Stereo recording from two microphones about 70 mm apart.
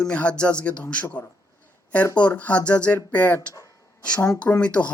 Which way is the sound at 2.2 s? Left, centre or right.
Centre.